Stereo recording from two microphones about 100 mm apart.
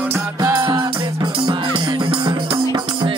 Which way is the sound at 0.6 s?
35° right (ahead or behind).